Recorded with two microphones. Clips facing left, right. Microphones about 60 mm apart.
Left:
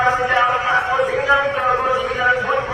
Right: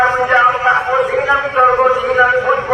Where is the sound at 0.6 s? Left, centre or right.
Right.